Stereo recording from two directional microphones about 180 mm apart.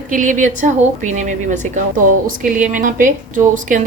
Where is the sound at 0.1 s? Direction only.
45° right (ahead or behind).